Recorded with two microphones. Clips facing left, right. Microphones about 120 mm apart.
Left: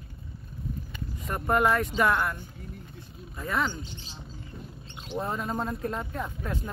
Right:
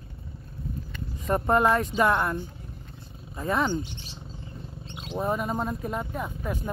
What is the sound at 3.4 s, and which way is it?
Speech, 25° right (ahead or behind).